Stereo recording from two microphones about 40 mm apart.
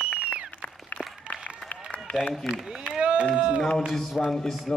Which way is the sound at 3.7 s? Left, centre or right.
Centre.